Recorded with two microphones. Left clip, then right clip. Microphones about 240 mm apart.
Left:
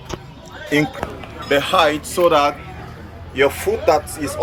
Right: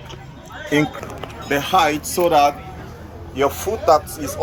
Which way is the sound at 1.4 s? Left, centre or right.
Centre.